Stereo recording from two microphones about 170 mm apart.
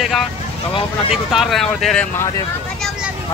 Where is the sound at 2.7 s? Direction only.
Centre (ahead or behind).